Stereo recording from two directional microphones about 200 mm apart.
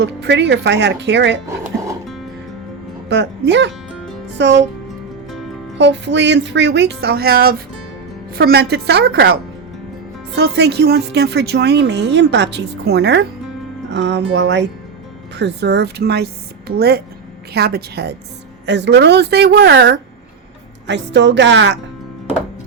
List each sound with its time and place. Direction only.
0.0 s a woman's voice: 60° right (ahead or behind)
1.5 s music: 15° right (ahead or behind)
3.1 s a woman's voice: 60° right (ahead or behind)
5.7 s a woman's voice: 60° right (ahead or behind)